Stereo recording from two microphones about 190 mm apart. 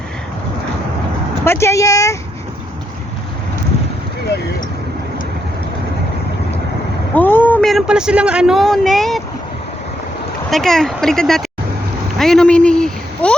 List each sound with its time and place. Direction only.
1.5 s speech: 15° left (ahead or behind)
7.1 s speech: 10° left (ahead or behind)
10.5 s speech: centre (ahead or behind)
12.2 s a sound: 5° left (ahead or behind)